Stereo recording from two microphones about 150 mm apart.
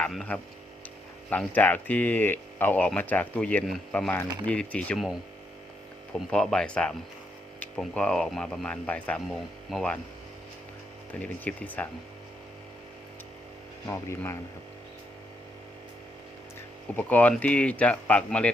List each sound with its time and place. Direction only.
0.0 s speech: 5° left (ahead or behind)
6.1 s speech: 5° left (ahead or behind)
11.1 s speech: 10° left (ahead or behind)
13.8 s speech: 15° left (ahead or behind)
17.0 s speech: 10° left (ahead or behind)